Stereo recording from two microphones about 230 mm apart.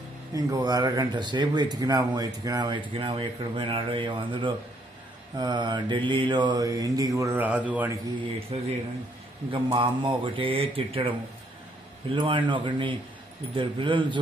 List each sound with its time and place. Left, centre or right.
0.3 s speech: centre
5.4 s mantra: centre
8.5 s speech: right